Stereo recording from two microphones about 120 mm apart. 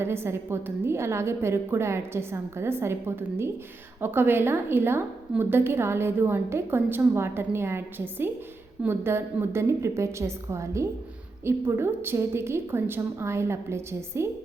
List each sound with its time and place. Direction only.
0.0 s a woman's voice: 20° right (ahead or behind)